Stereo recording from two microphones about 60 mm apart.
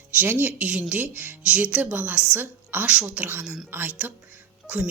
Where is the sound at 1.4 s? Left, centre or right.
Centre.